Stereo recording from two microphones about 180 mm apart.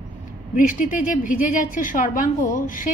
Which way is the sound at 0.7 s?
50° left (ahead or behind).